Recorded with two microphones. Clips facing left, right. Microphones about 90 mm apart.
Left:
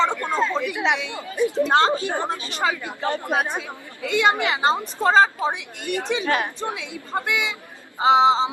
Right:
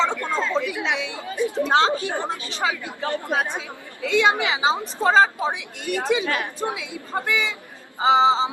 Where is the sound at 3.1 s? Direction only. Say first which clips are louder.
Even; 15° left (ahead or behind).